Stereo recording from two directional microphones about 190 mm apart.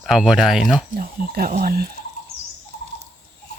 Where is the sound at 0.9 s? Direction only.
50° right (ahead or behind).